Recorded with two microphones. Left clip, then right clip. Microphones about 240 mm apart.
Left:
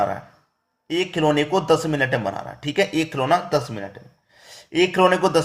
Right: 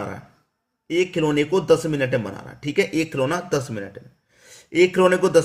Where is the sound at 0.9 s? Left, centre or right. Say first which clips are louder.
Left 1 dB; centre.